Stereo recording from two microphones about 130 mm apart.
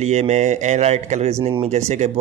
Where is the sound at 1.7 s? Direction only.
60° right (ahead or behind).